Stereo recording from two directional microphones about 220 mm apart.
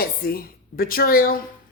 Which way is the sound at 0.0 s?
40° left (ahead or behind).